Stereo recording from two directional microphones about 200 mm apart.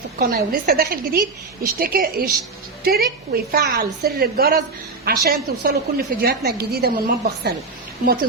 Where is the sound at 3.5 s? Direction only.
50° right (ahead or behind).